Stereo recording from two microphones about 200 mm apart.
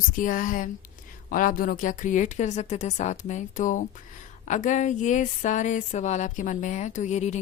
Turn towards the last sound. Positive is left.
turn(degrees=35)  # may be behind; listen again after turning